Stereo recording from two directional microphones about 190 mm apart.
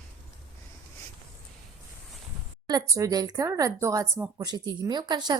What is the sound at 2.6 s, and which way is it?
Speech, 20° right (ahead or behind).